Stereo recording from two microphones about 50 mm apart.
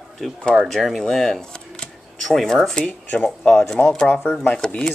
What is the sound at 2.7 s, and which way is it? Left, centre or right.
Speech, left.